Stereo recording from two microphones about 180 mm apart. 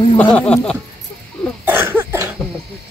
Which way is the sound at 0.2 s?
5° left (ahead or behind).